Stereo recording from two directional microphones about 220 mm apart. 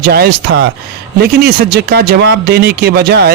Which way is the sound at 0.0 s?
45° right (ahead or behind).